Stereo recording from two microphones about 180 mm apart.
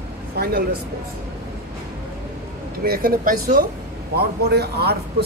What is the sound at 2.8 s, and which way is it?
Speech, 55° right (ahead or behind).